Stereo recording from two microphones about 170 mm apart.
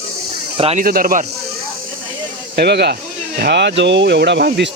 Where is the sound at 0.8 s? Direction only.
60° right (ahead or behind).